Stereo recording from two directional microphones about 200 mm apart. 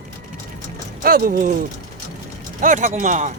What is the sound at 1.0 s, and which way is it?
Speech, 45° right (ahead or behind).